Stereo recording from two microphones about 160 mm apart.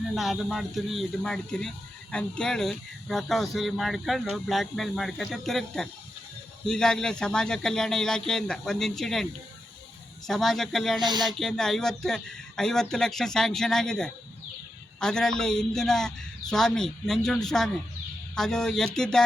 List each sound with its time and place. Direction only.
0.1 s speech: centre (ahead or behind)
10.2 s speech: centre (ahead or behind)
11.0 s speech: 25° right (ahead or behind)
11.3 s speech: centre (ahead or behind)